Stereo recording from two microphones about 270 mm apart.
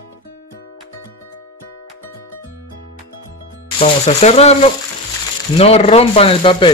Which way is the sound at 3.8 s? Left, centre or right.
Left.